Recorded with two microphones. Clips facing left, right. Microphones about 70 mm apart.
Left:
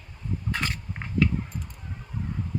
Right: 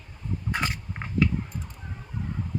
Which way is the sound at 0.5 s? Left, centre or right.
Centre.